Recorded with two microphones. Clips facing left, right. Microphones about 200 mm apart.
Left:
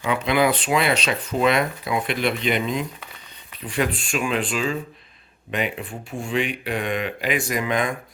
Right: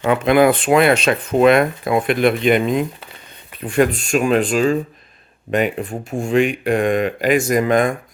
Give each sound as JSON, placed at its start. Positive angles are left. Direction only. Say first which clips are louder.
{"t": 0.0, "sound": "speech", "louder": "right 7 dB", "side_deg": -50}